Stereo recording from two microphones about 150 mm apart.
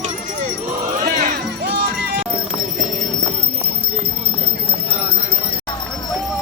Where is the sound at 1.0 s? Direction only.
70° right (ahead or behind).